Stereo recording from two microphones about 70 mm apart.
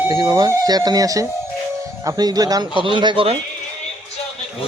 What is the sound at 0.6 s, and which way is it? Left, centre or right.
Speech, right.